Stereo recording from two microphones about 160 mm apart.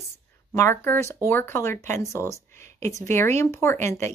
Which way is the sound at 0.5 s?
15° left (ahead or behind).